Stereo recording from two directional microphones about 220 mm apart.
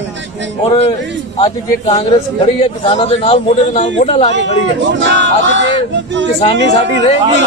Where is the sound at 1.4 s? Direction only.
20° left (ahead or behind).